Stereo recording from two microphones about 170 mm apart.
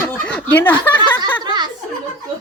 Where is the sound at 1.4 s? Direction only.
25° right (ahead or behind).